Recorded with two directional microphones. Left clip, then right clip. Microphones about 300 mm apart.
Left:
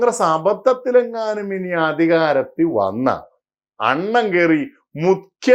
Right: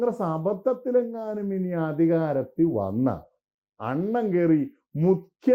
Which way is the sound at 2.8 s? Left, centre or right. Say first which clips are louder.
Left 9 dB; left.